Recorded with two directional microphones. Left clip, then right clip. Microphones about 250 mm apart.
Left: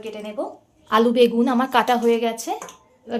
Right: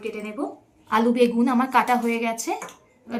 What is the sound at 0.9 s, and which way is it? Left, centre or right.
A woman's voice, left.